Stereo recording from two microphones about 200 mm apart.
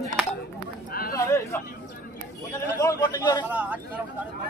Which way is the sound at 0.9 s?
45° left (ahead or behind).